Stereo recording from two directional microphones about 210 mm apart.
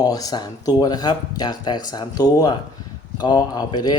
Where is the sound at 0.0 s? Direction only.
15° left (ahead or behind).